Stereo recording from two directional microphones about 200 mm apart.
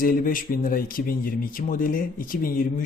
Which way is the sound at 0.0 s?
45° left (ahead or behind).